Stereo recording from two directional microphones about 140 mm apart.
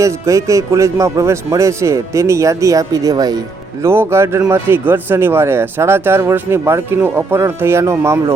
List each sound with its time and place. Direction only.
0.0 s a man's voice: 20° right (ahead or behind)